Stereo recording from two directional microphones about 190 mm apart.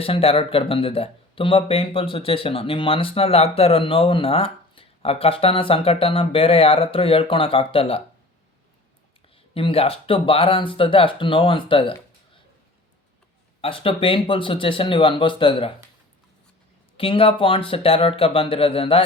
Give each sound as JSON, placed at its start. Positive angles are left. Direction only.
{"t": 0.0, "sound": "speech", "side_deg": 30}
{"t": 9.6, "sound": "speech", "side_deg": 30}
{"t": 13.6, "sound": "speech", "side_deg": 30}
{"t": 17.0, "sound": "speech", "side_deg": 30}